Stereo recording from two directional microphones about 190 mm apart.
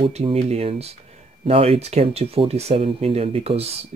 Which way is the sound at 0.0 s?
30° right (ahead or behind).